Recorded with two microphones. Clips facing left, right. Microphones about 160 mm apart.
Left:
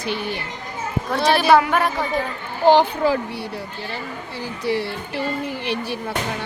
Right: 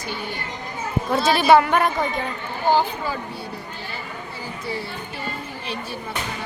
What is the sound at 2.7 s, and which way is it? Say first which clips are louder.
Speech: left 6 dB; 80° left.